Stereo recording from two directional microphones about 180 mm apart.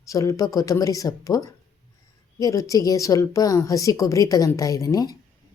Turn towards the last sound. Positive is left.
turn(degrees=20)  # may be behind; listen again after turning